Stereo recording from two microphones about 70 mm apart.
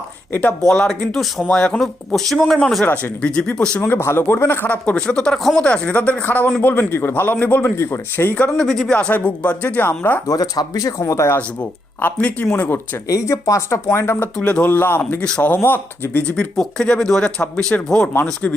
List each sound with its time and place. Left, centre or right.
0.6 s speech: centre
2.8 s speech: left
3.8 s a man's voice: left
8.4 s speech: centre
10.2 s speech: left
12.0 s speech: left
13.1 s speech: left
14.3 s speech: centre
16.4 s speech: centre